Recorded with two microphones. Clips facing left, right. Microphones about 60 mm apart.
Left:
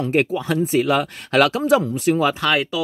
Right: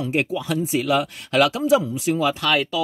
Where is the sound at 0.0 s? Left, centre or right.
Left.